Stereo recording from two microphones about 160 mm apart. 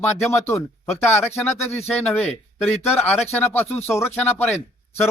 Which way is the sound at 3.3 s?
15° left (ahead or behind).